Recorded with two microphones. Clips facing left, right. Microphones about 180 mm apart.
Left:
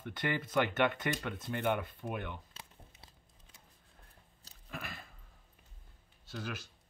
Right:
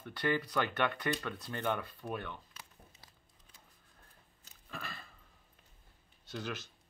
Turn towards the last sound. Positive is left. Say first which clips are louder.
# right 1 dB
turn(degrees=10)  # may be behind; listen again after turning